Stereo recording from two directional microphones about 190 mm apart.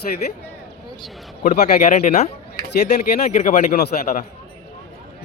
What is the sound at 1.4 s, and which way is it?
Speech, 45° left (ahead or behind).